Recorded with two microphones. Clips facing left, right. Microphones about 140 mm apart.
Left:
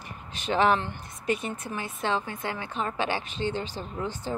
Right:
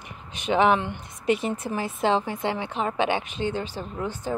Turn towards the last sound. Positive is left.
turn(degrees=-10)  # may be behind; listen again after turning